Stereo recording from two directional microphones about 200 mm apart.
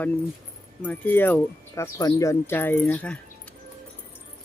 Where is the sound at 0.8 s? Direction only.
10° left (ahead or behind).